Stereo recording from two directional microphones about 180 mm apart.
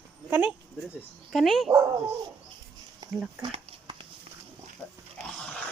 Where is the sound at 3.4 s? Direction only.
30° right (ahead or behind).